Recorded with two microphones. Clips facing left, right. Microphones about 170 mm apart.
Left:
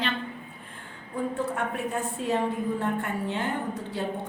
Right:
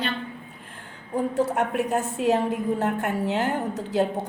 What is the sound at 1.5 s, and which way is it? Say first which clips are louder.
A woman's voice: right 6 dB; 80° right.